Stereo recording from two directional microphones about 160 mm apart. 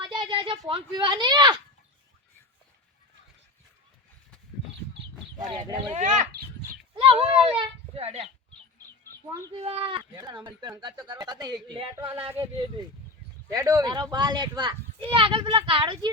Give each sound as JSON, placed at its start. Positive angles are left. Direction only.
{"t": 0.0, "sound": "a sound", "side_deg": -30}
{"t": 0.7, "sound": "a child's voice", "side_deg": -30}
{"t": 5.5, "sound": "a child's voice", "side_deg": -25}
{"t": 5.9, "sound": "speech", "side_deg": -50}
{"t": 6.9, "sound": "speech", "side_deg": -35}
{"t": 9.5, "sound": "a child's voice", "side_deg": -35}
{"t": 13.5, "sound": "a child's voice", "side_deg": -20}